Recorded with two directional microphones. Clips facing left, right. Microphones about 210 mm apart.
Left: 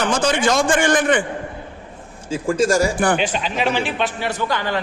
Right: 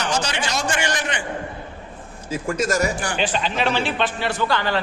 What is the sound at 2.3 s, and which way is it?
Speech, 30° left (ahead or behind).